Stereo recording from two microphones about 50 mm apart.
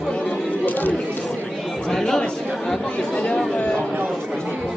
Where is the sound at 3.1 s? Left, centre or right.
Left.